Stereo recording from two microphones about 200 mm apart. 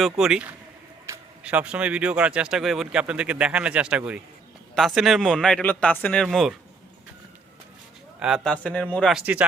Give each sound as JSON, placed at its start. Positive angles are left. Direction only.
{"t": 0.0, "sound": "speech", "side_deg": -5}
{"t": 8.2, "sound": "speech", "side_deg": -5}